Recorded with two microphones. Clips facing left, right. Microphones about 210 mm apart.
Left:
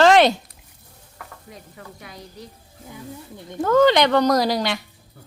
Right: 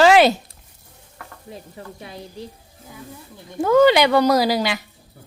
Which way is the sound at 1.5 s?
25° right (ahead or behind).